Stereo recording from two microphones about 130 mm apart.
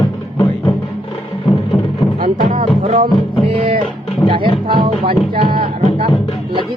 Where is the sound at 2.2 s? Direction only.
85° right.